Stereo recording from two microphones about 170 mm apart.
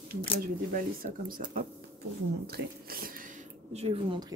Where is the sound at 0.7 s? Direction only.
55° right (ahead or behind).